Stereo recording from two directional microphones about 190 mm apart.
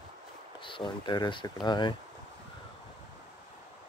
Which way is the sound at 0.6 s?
25° left (ahead or behind).